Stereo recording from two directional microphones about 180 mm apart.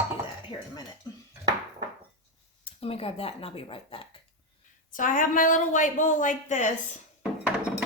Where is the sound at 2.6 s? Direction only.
30° left (ahead or behind).